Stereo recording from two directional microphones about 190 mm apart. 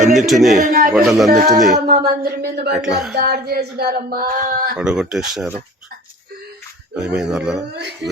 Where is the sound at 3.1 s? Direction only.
55° right (ahead or behind).